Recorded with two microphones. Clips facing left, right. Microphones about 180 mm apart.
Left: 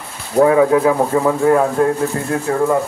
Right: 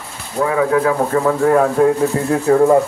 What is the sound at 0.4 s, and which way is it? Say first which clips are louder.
Speech: left 6 dB; 35° left (ahead or behind).